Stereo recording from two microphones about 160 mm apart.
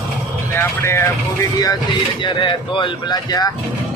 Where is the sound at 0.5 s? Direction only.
15° left (ahead or behind).